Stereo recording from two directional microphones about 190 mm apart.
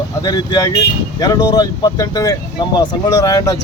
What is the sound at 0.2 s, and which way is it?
Speech, 20° left (ahead or behind).